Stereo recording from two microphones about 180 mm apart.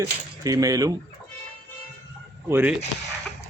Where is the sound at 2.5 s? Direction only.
10° right (ahead or behind).